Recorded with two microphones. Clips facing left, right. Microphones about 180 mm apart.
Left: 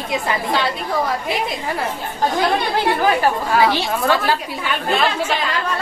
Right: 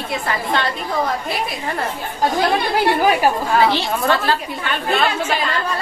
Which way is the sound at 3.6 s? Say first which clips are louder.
Even; 10° left (ahead or behind).